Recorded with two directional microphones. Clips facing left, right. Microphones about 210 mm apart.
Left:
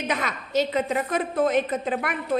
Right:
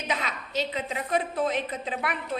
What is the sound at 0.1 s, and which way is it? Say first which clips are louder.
A woman's voice: left 3 dB; 50° left (ahead or behind).